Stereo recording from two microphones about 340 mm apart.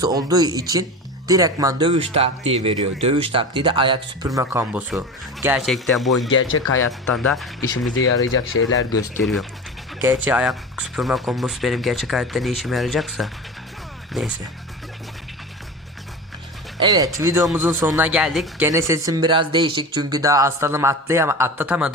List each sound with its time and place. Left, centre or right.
0.0 s speech: centre
6.2 s speech: left
6.7 s speech: centre
7.7 s speech: left
8.9 s speech: centre
16.8 s speech: centre